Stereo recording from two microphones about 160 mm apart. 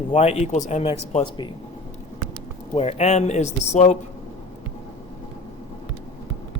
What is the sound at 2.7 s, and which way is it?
A man's voice, 40° left (ahead or behind).